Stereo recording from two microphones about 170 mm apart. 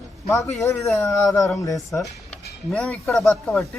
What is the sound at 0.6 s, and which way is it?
Speech, 15° left (ahead or behind).